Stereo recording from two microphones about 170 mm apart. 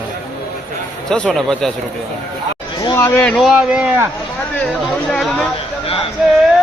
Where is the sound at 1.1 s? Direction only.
5° left (ahead or behind).